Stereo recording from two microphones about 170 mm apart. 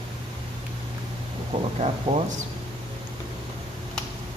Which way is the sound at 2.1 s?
35° right (ahead or behind).